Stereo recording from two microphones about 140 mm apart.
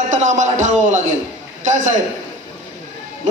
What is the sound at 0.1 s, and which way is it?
A man's voice, 60° right (ahead or behind).